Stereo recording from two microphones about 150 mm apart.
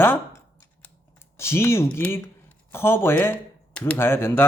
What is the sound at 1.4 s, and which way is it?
Speech, 15° left (ahead or behind).